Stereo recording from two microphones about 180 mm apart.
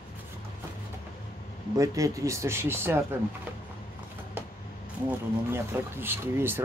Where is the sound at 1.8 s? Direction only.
20° right (ahead or behind).